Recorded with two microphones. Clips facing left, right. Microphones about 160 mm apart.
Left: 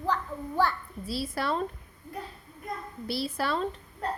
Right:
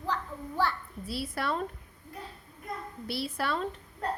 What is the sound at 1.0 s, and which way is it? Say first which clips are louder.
Speech: left 2 dB; 35° left (ahead or behind).